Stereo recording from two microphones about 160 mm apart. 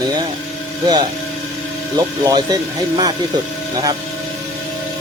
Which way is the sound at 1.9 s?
25° right (ahead or behind).